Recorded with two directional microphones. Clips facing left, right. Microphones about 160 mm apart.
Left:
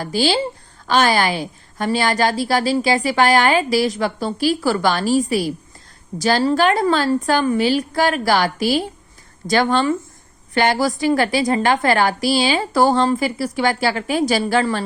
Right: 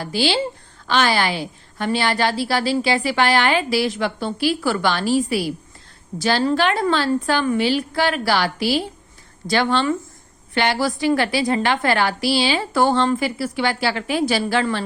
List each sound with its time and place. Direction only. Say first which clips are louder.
0.0 s a woman's voice: left 2 dB; 45° left (ahead or behind)